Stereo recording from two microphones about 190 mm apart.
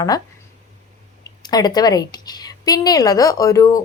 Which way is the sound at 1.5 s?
20° left (ahead or behind).